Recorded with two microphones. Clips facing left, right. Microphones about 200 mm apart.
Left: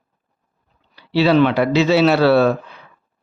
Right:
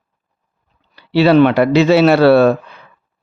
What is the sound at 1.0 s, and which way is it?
Speech, 60° right (ahead or behind).